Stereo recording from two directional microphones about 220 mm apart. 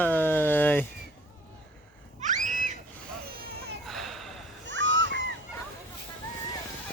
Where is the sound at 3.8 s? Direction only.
Centre (ahead or behind).